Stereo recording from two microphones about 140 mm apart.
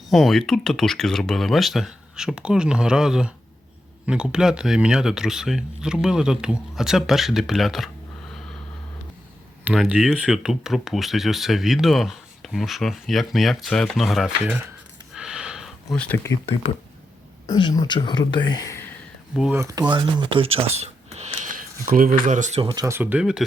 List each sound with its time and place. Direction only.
0.1 s speech: centre (ahead or behind)
9.6 s speech: 10° right (ahead or behind)
15.1 s a sound: 5° right (ahead or behind); by 16.4 s 20° left (ahead or behind)
17.4 s speech: 30° left (ahead or behind)
19.3 s speech: 5° right (ahead or behind)
19.5 s speech: 20° right (ahead or behind)
19.9 s speech: 35° right (ahead or behind)
21.4 s speech: 80° right; by 22.6 s 60° right (ahead or behind)
22.7 s speech: 25° right (ahead or behind)
23.0 s speech: 10° right (ahead or behind)